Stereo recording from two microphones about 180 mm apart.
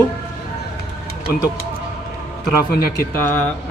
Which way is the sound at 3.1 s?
10° left (ahead or behind).